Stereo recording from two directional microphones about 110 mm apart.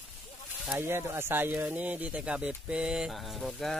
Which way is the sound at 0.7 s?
20° right (ahead or behind).